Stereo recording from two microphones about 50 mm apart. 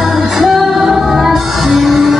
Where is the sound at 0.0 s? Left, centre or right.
Centre.